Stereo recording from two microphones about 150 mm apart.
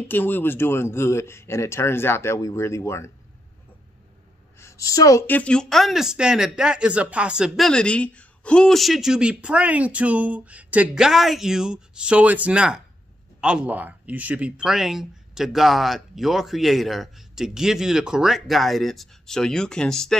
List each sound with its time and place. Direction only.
0.1 s speech: 15° left (ahead or behind)
4.6 s speech: 20° left (ahead or behind); by 20.2 s 5° left (ahead or behind)